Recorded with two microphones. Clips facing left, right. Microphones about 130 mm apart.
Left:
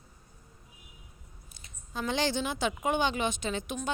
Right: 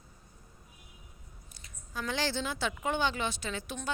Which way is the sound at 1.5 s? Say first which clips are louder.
Left 3 dB; 25° left (ahead or behind).